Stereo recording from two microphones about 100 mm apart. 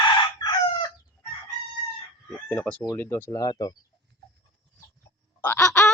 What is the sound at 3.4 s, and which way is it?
Speech, 40° left (ahead or behind).